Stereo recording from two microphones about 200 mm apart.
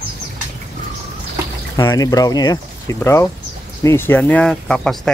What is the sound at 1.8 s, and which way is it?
Speech, 15° left (ahead or behind).